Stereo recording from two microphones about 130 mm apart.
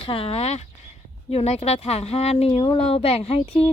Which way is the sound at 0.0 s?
45° left (ahead or behind).